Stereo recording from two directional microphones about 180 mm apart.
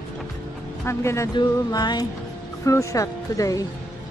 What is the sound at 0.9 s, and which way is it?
Speech, 15° left (ahead or behind).